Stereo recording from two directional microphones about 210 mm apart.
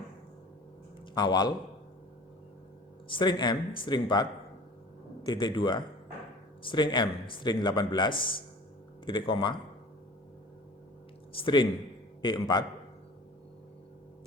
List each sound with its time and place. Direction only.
1.1 s speech: 20° left (ahead or behind)
3.1 s speech: 20° left (ahead or behind)
11.3 s a man's voice: 25° left (ahead or behind)